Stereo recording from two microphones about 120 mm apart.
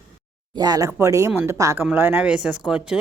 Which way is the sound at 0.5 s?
35° right (ahead or behind).